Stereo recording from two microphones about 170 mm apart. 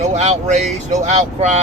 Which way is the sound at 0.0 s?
40° right (ahead or behind).